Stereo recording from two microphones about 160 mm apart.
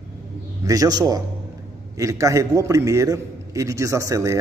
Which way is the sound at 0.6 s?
20° right (ahead or behind).